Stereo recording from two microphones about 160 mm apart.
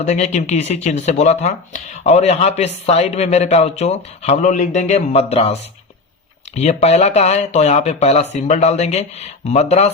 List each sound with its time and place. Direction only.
0.0 s speech: 45° left (ahead or behind)